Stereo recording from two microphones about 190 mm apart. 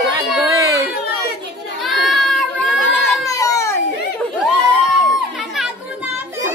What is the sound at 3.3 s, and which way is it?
Baby cry, 15° left (ahead or behind).